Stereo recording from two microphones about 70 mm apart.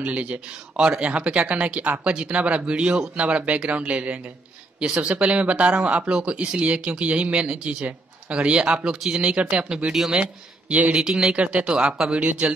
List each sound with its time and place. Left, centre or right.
0.0 s speech: centre
10.2 s speech: centre